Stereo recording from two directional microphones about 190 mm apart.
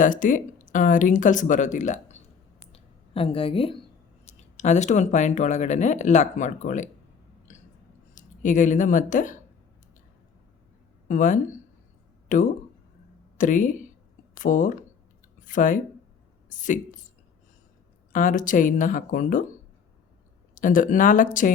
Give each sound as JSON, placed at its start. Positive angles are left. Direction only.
{"t": 0.0, "sound": "speech", "side_deg": 45}
{"t": 2.7, "sound": "a sound", "side_deg": 30}
{"t": 4.3, "sound": "speech", "side_deg": 35}
{"t": 8.1, "sound": "speech", "side_deg": 40}
{"t": 11.1, "sound": "speech", "side_deg": 40}
{"t": 18.1, "sound": "speech", "side_deg": 45}
{"t": 20.6, "sound": "speech", "side_deg": 45}